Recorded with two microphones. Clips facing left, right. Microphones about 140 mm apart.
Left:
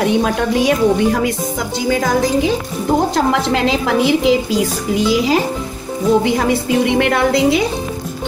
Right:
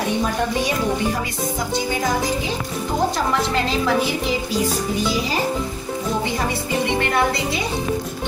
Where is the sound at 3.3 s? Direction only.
90° left.